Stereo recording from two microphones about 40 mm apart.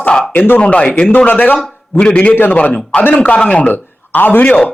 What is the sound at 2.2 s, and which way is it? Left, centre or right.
Speech, left.